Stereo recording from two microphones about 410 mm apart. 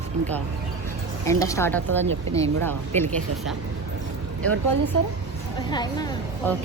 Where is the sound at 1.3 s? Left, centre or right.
Centre.